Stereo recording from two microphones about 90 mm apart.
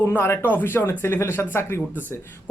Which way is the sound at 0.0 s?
25° left (ahead or behind).